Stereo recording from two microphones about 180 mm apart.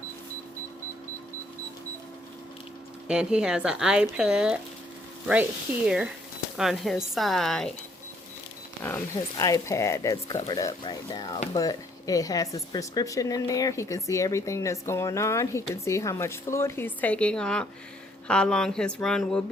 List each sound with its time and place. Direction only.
3.1 s speech: 5° right (ahead or behind)
9.4 s speech: 20° left (ahead or behind)